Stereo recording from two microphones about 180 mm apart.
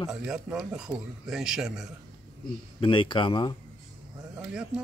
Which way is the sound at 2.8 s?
25° left (ahead or behind).